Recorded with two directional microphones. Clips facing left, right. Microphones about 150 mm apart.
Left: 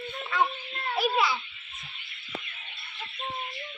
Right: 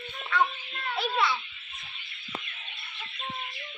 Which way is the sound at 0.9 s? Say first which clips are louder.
Left 2 dB; centre (ahead or behind).